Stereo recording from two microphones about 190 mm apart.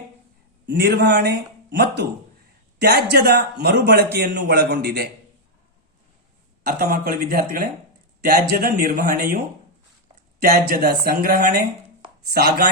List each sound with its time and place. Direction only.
0.6 s a man's voice: 60° right (ahead or behind)
6.7 s speech: 50° right (ahead or behind)
10.4 s speech: 50° right (ahead or behind)